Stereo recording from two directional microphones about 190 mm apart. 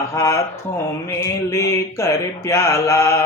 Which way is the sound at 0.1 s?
15° left (ahead or behind).